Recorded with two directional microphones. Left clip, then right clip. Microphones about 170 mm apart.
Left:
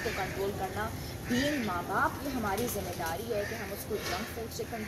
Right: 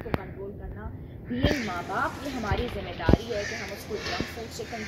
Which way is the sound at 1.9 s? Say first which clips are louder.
Even; centre (ahead or behind).